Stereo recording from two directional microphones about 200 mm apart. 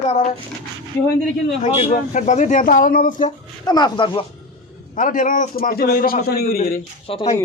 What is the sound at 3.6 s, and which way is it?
Speech, 20° left (ahead or behind).